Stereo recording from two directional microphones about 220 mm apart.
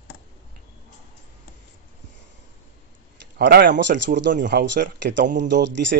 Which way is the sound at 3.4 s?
50° right (ahead or behind).